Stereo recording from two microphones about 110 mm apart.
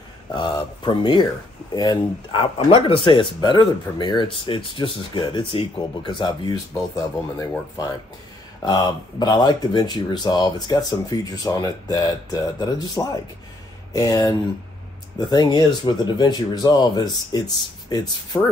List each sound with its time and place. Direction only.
0.3 s a sound: 45° left (ahead or behind)
1.7 s speech: 40° left (ahead or behind)
2.5 s speech: 60° left (ahead or behind); by 6.5 s 45° left (ahead or behind)
6.7 s speech: 30° left (ahead or behind)